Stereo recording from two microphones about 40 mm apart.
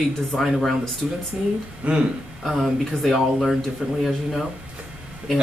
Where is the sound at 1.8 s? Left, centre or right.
Right.